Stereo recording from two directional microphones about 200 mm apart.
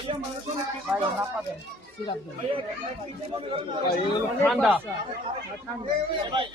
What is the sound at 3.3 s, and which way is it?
Speech, 25° right (ahead or behind).